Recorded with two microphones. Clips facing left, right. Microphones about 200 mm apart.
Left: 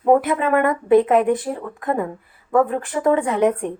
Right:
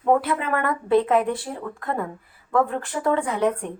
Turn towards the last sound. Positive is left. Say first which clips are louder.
# left 4 dB
turn(degrees=20)  # may be behind; listen again after turning